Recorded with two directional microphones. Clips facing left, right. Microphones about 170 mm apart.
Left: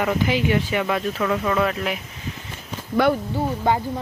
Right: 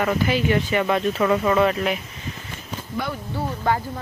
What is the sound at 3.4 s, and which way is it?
Speech, 20° left (ahead or behind).